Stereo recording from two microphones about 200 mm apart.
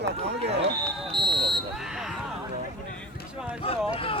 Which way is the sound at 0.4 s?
60° right (ahead or behind).